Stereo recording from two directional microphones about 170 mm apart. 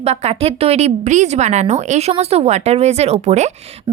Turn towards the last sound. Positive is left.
turn(degrees=-35)  # may be behind; listen again after turning